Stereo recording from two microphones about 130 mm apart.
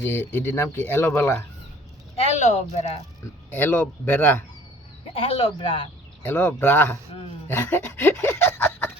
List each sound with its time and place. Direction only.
0.0 s speech: 15° left (ahead or behind)
2.3 s speech: 60° left (ahead or behind)
3.5 s speech: 15° left (ahead or behind)
5.1 s speech: 50° left (ahead or behind)
6.2 s speech: 10° left (ahead or behind)
7.1 s speech: 50° left (ahead or behind)
7.4 s speech: 15° left (ahead or behind)